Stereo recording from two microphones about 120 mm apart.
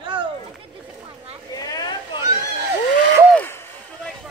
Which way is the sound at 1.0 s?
55° right (ahead or behind).